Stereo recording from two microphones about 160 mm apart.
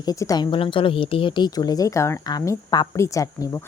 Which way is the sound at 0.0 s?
20° left (ahead or behind).